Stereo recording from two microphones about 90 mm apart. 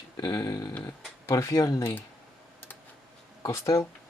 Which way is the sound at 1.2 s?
35° left (ahead or behind).